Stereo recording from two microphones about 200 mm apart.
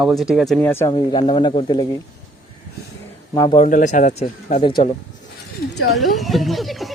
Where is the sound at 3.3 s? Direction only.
20° left (ahead or behind).